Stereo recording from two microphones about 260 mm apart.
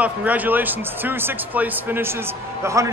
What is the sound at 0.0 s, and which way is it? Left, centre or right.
Speech, centre.